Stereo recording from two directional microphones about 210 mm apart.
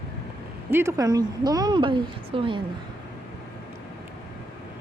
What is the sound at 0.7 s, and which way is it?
Speech, 10° right (ahead or behind).